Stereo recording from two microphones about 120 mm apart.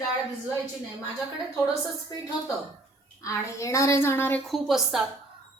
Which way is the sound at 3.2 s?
25° left (ahead or behind).